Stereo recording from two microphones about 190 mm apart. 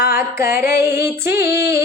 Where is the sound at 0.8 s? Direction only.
15° right (ahead or behind).